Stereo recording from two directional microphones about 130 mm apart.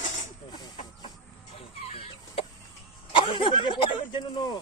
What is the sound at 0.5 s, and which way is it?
Speech, 35° left (ahead or behind).